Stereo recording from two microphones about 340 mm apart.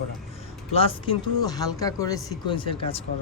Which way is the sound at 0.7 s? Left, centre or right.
Centre.